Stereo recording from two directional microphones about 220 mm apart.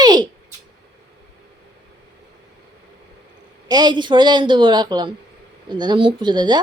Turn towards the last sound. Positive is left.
turn(degrees=-20)  # may be behind; listen again after turning